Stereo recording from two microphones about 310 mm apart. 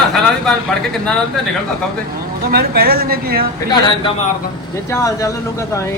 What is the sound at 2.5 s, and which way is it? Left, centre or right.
Speech, right.